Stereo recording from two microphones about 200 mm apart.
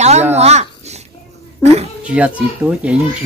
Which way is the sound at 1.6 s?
30° right (ahead or behind).